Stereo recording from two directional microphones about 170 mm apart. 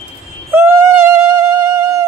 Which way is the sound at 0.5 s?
15° right (ahead or behind).